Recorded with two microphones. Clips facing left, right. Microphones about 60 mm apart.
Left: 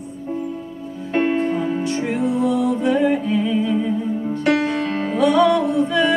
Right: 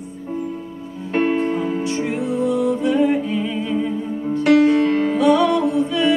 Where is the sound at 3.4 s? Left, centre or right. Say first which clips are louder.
Left 3 dB; right.